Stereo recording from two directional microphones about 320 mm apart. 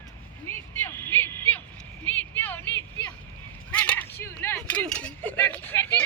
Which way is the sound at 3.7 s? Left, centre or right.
Centre.